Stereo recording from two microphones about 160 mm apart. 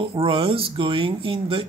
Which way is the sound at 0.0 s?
30° right (ahead or behind).